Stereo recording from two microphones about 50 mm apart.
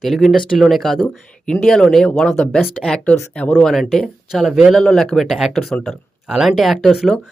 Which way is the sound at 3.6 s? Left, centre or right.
Centre.